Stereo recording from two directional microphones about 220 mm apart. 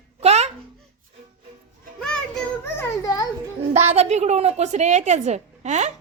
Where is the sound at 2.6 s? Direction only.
10° left (ahead or behind).